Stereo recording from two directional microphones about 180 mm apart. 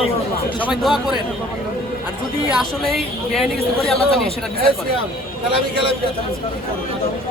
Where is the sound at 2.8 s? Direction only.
Centre (ahead or behind).